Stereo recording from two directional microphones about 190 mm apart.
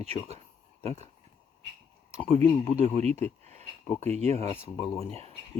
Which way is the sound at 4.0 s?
35° right (ahead or behind).